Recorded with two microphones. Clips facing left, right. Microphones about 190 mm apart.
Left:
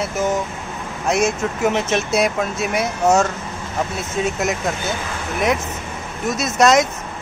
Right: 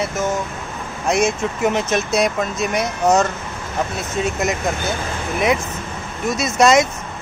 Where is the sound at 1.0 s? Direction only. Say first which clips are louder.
Right 1 dB; 5° left (ahead or behind).